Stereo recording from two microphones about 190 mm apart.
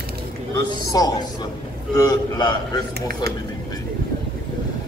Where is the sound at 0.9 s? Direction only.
20° left (ahead or behind).